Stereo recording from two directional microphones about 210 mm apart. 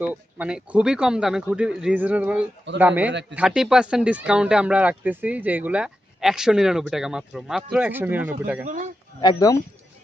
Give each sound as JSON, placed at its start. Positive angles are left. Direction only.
{"t": 0.0, "sound": "a man's voice", "side_deg": -10}
{"t": 3.1, "sound": "speech", "side_deg": -55}
{"t": 3.3, "sound": "speech", "side_deg": -5}
{"t": 8.6, "sound": "speech", "side_deg": -35}
{"t": 9.2, "sound": "speech", "side_deg": 15}